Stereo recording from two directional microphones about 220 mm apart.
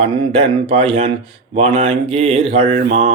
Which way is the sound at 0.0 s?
25° right (ahead or behind).